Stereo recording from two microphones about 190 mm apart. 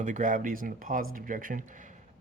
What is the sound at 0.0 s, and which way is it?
A man's voice, 40° right (ahead or behind).